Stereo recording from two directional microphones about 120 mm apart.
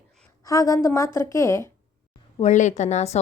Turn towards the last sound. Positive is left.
turn(degrees=70)  # may be behind; listen again after turning